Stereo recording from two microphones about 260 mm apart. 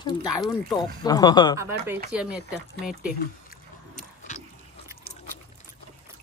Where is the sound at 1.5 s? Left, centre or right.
Centre.